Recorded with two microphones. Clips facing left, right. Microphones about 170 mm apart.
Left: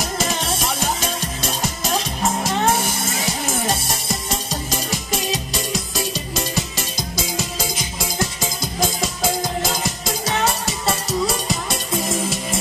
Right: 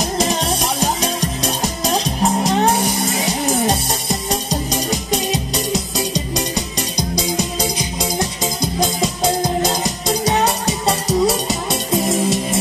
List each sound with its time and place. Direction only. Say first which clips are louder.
0.0 s music: right 5 dB; 20° right (ahead or behind)
2.2 s music: right 4 dB; 20° right (ahead or behind)
5.1 s music: right 3 dB; centre (ahead or behind)
6.3 s music: right 3 dB; 20° right (ahead or behind)
8.5 s music: right 4 dB; centre (ahead or behind)
11.1 s music: right 5 dB; centre (ahead or behind)